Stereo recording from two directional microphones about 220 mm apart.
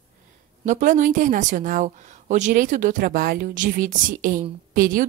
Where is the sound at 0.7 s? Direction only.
35° right (ahead or behind).